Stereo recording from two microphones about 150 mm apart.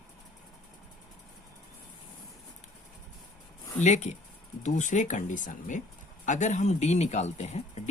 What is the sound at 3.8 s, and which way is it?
Speech, 50° left (ahead or behind).